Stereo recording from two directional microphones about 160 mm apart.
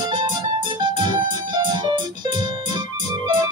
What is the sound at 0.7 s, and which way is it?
Music, 30° right (ahead or behind).